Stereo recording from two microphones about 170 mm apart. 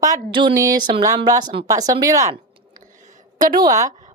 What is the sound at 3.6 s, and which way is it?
Speech, 20° right (ahead or behind).